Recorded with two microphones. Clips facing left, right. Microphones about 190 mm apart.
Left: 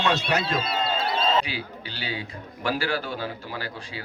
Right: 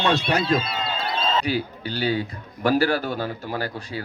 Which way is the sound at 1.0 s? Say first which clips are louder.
Left 1 dB; 5° left (ahead or behind).